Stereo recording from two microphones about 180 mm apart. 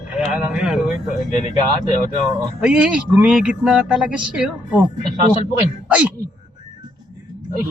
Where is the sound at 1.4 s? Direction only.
40° left (ahead or behind).